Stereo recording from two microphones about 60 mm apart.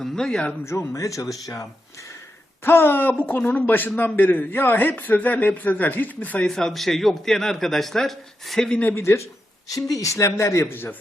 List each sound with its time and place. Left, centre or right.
0.0 s speech: centre
0.6 s speech: left
2.6 s a man's voice: left
6.5 s a man's voice: centre
9.0 s speech: left
9.6 s speech: left
10.0 s speech: left